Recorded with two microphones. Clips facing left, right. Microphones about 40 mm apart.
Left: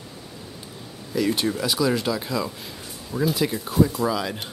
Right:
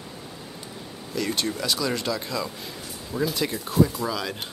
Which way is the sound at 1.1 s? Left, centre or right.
Centre.